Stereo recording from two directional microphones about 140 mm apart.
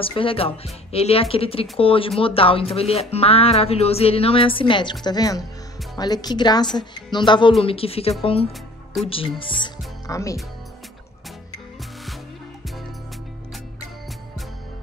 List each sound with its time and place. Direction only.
0.0 s a woman's voice: 40° left (ahead or behind)
10.0 s speech: 25° left (ahead or behind)